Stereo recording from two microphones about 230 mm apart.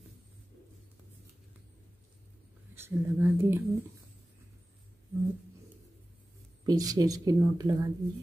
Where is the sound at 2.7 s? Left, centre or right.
Centre.